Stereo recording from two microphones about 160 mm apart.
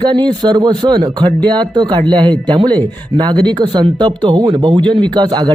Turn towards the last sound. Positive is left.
turn(degrees=-25)  # may be behind; listen again after turning